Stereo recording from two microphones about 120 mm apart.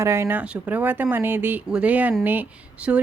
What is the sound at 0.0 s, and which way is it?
Speech, 20° right (ahead or behind).